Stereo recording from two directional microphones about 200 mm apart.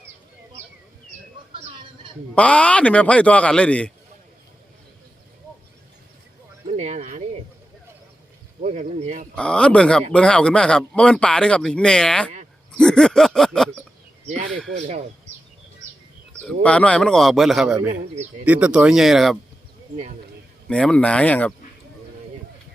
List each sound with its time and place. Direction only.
2.3 s a man's voice: 5° left (ahead or behind)
6.7 s a sound: 35° right (ahead or behind)
8.6 s speech: 35° right (ahead or behind)
9.3 s speech: 5° left (ahead or behind)
14.8 s speech: 35° right (ahead or behind)
16.6 s speech: 5° left (ahead or behind)
17.8 s speech: 35° right (ahead or behind)
18.4 s speech: 5° right (ahead or behind)
20.7 s speech: 5° left (ahead or behind)